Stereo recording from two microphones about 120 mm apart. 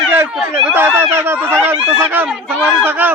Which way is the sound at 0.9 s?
20° right (ahead or behind).